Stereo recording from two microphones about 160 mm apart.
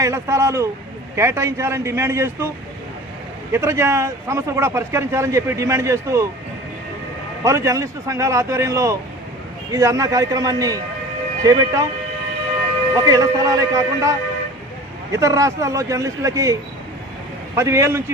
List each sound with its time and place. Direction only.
0.0 s a man's voice: 15° right (ahead or behind)
3.5 s a man's voice: 15° right (ahead or behind)
7.4 s speech: 20° right (ahead or behind)
13.0 s a man's voice: 20° right (ahead or behind)